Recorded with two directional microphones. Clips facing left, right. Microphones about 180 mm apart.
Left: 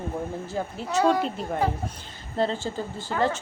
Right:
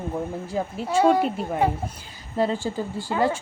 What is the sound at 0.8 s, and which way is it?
Speech, 25° right (ahead or behind).